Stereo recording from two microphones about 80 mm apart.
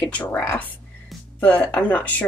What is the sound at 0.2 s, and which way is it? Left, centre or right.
Speech, left.